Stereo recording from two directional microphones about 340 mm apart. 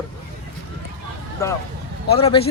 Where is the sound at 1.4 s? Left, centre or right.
Centre.